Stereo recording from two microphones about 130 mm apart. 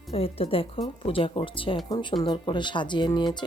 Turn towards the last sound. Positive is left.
turn(degrees=35)  # may be behind; listen again after turning